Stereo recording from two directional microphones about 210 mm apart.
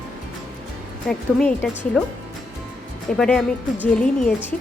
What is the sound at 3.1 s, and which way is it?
Speech, 5° left (ahead or behind).